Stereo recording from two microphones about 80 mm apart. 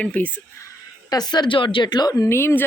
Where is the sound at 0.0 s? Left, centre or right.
Centre.